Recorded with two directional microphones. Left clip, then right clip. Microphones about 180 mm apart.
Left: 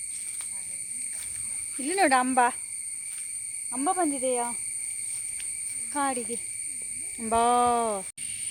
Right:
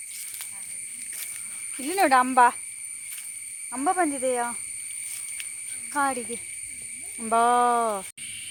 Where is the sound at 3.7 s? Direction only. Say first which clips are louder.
Right 3 dB; 10° right (ahead or behind).